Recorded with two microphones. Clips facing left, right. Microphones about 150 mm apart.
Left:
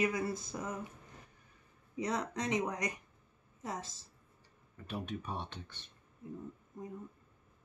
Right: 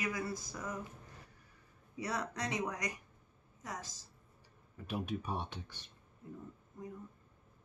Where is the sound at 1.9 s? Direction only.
20° left (ahead or behind).